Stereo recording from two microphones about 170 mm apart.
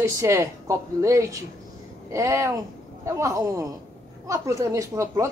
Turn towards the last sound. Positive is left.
turn(degrees=-20)  # may be behind; listen again after turning